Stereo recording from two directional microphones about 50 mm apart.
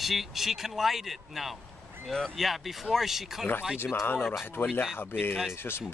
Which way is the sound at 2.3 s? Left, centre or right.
Centre.